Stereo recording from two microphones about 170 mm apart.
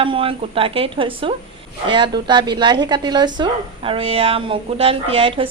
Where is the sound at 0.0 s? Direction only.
30° right (ahead or behind).